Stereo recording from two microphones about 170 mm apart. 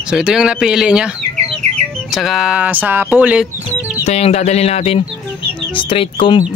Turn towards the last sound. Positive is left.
turn(degrees=30)  # may be behind; listen again after turning